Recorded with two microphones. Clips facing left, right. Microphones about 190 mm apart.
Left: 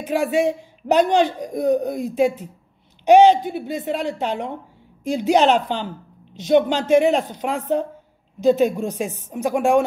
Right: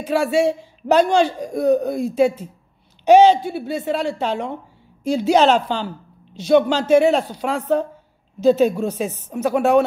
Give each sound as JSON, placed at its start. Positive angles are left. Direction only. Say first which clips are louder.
{"t": 0.0, "sound": "a woman's voice", "louder": "right 2 dB", "side_deg": 15}